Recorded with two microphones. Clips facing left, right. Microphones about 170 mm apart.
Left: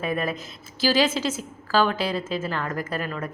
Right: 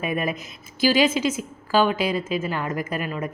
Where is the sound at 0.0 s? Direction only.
15° right (ahead or behind).